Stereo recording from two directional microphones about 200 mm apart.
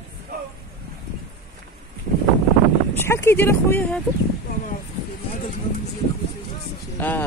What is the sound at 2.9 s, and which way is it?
Speech, 10° left (ahead or behind).